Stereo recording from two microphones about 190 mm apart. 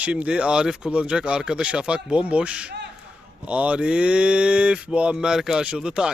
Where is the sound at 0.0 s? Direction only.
5° right (ahead or behind).